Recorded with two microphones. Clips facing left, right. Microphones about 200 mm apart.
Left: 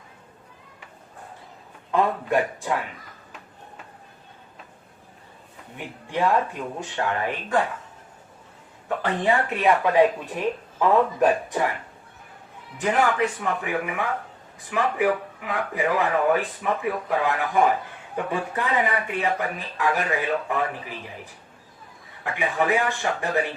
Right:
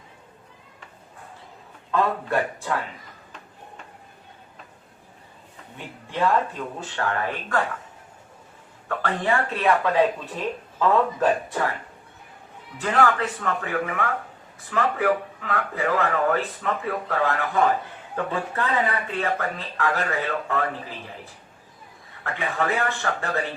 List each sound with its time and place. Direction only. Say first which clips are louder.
1.9 s speech: left 1 dB; 15° left (ahead or behind)
5.7 s speech: left 3 dB; 15° left (ahead or behind)
8.9 s speech: left 2 dB; 15° left (ahead or behind)
12.8 s speech: even; 15° left (ahead or behind)
22.2 s speech: left 2 dB; 15° left (ahead or behind)